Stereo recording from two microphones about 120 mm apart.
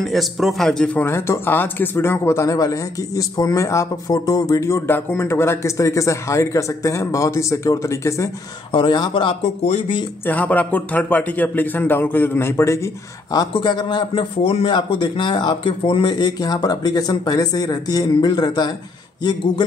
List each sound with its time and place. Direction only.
0.0 s a man's voice: centre (ahead or behind)
1.0 s speech: 20° left (ahead or behind)
8.7 s speech: 40° left (ahead or behind)
10.2 s a man's voice: 15° left (ahead or behind)
13.5 s speech: 40° left (ahead or behind)
14.4 s speech: 55° left (ahead or behind)